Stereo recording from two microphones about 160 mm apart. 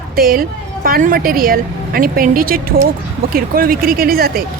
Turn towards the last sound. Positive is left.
turn(degrees=-70)  # may be behind; listen again after turning